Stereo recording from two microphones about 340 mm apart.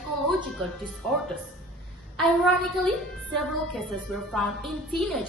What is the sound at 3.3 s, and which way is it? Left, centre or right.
A woman's voice, centre.